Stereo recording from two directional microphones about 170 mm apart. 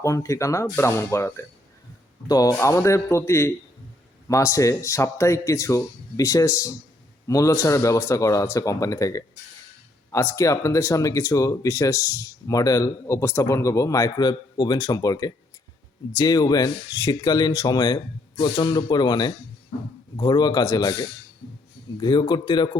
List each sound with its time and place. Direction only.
0.0 s speech: 20° left (ahead or behind)